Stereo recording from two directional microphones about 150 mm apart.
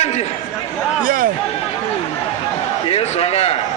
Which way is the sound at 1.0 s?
65° right (ahead or behind).